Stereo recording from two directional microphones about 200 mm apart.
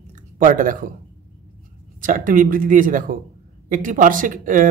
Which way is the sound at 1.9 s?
40° right (ahead or behind).